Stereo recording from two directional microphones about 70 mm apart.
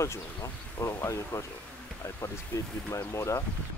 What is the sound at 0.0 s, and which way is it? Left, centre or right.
Speech, left.